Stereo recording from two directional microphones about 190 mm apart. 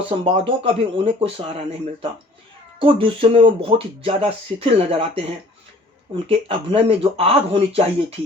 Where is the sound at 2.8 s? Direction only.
30° right (ahead or behind).